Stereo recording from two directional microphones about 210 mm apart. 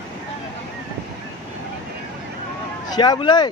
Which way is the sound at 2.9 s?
20° left (ahead or behind).